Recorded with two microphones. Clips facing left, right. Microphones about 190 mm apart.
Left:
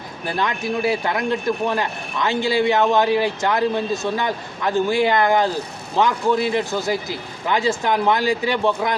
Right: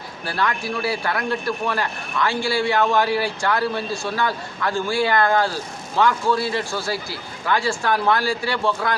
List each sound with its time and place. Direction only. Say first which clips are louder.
0.3 s speech: left 2 dB; 20° left (ahead or behind)